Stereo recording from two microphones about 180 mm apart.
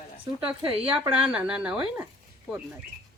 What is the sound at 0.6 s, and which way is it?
Speech, 30° right (ahead or behind).